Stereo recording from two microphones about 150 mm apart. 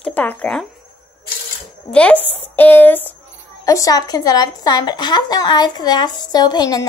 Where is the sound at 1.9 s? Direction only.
5° left (ahead or behind).